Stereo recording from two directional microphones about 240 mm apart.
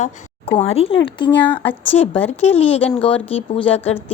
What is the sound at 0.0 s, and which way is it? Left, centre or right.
Speech, left.